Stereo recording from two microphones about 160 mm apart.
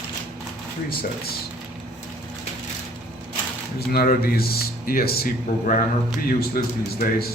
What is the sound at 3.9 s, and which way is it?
Speech, 70° left (ahead or behind).